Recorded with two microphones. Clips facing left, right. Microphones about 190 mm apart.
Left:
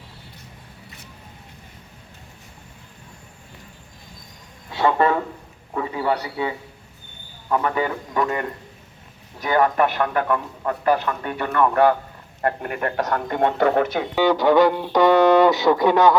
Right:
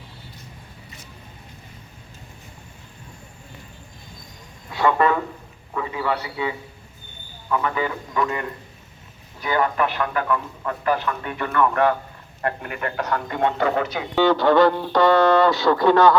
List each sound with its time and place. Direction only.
4.7 s a sound: 25° left (ahead or behind)
7.5 s a man's voice: 40° left (ahead or behind)
14.2 s speech: 15° left (ahead or behind)